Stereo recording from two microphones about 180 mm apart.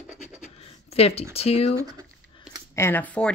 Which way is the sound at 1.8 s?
20° right (ahead or behind).